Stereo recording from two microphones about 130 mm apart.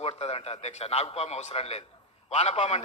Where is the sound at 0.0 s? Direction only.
50° left (ahead or behind).